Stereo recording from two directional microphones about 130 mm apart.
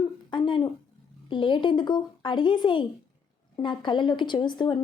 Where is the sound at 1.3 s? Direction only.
35° left (ahead or behind).